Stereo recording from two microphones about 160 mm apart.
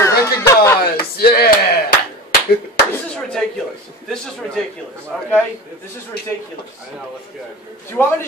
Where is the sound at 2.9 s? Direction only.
5° left (ahead or behind).